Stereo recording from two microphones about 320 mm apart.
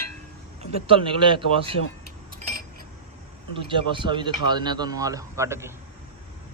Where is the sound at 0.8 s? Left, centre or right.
Centre.